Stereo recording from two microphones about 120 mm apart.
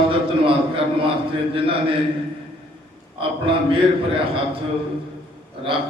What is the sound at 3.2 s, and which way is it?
A man's voice, 50° right (ahead or behind).